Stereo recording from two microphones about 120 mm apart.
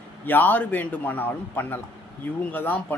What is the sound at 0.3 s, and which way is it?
Speech, 15° left (ahead or behind).